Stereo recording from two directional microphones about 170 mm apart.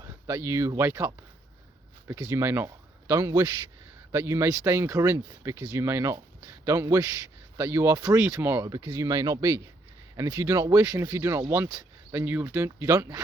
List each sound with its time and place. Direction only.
0.0 s speech: 15° right (ahead or behind)